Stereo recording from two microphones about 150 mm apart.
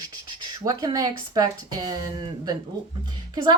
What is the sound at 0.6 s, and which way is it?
A woman's voice, 25° right (ahead or behind).